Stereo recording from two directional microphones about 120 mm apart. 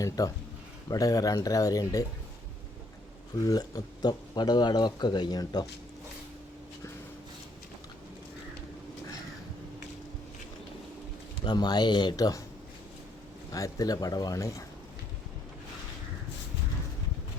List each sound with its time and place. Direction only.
0.2 s speech: 30° left (ahead or behind)
3.4 s speech: 30° left (ahead or behind)
11.4 s speech: 35° left (ahead or behind)
13.5 s speech: 30° left (ahead or behind)